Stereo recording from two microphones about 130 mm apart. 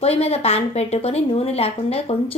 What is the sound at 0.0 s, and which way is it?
A woman's voice, 50° left (ahead or behind).